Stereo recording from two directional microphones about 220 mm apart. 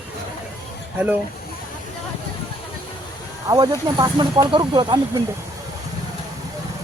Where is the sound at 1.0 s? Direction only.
5° right (ahead or behind).